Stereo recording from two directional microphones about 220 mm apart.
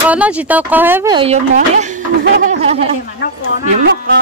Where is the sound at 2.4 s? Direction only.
30° right (ahead or behind).